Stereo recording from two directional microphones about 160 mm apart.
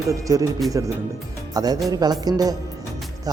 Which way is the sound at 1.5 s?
25° right (ahead or behind).